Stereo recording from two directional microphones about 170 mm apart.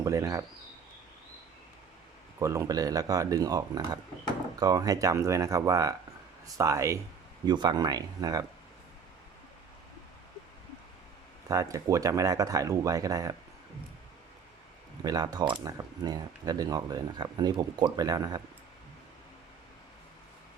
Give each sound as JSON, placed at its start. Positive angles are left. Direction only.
{"t": 0.0, "sound": "speech", "side_deg": -20}
{"t": 2.4, "sound": "speech", "side_deg": -15}
{"t": 11.4, "sound": "speech", "side_deg": -20}
{"t": 15.0, "sound": "speech", "side_deg": -20}